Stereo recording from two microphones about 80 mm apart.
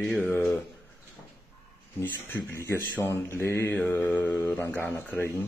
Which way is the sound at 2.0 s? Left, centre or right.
Left.